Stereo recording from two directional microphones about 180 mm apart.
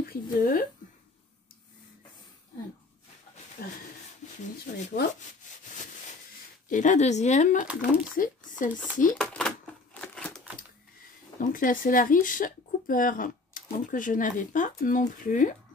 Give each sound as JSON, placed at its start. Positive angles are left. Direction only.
{"t": 0.1, "sound": "speech", "side_deg": 55}
{"t": 3.6, "sound": "a sound", "side_deg": 50}
{"t": 4.7, "sound": "speech", "side_deg": 45}
{"t": 6.7, "sound": "speech", "side_deg": 45}
{"t": 7.6, "sound": "speech", "side_deg": -5}
{"t": 8.2, "sound": "a sound", "side_deg": 45}
{"t": 9.1, "sound": "speech", "side_deg": 5}
{"t": 9.9, "sound": "crumpling", "side_deg": 5}
{"t": 11.3, "sound": "speech", "side_deg": 50}